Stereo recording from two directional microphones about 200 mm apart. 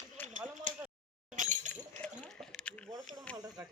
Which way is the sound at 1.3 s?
40° right (ahead or behind).